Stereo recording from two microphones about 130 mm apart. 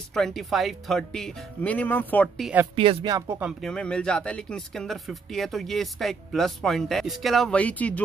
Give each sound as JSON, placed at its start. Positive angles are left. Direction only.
{"t": 0.1, "sound": "speech", "side_deg": 0}
{"t": 2.7, "sound": "speech", "side_deg": -45}
{"t": 3.1, "sound": "speech", "side_deg": -25}
{"t": 3.6, "sound": "speech", "side_deg": 5}